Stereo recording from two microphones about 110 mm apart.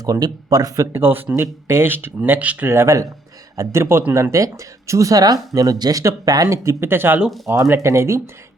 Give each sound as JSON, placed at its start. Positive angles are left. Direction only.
{"t": 0.0, "sound": "speech", "side_deg": -35}
{"t": 7.2, "sound": "speech", "side_deg": 0}
{"t": 7.4, "sound": "speech", "side_deg": -25}